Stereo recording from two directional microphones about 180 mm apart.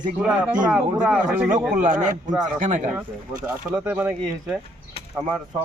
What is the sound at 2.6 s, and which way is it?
Speech, 45° right (ahead or behind).